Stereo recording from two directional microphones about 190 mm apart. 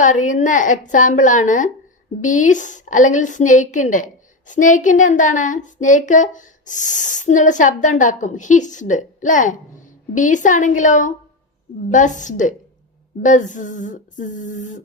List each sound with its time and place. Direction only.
0.0 s a woman's voice: 40° left (ahead or behind)